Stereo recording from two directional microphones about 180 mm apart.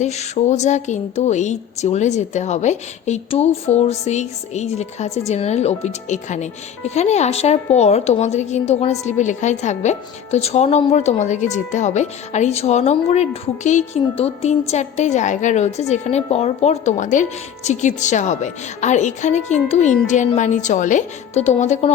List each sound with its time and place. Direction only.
0.0 s a woman's voice: 40° left (ahead or behind)